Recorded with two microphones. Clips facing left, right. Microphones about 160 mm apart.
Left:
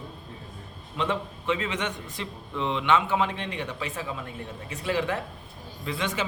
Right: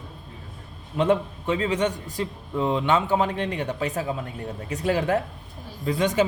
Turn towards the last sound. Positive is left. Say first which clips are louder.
# right 8 dB
turn(degrees=-40)  # may be behind; listen again after turning